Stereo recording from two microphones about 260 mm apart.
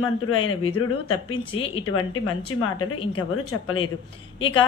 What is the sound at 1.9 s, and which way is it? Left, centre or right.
Speech, left.